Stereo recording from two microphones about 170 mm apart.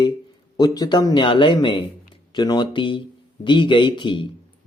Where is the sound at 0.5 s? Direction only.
20° left (ahead or behind).